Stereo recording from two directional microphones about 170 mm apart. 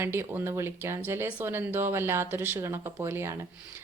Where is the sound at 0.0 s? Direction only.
15° right (ahead or behind).